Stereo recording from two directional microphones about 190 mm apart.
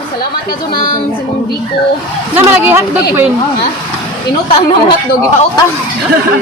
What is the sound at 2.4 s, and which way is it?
Speech, 15° right (ahead or behind).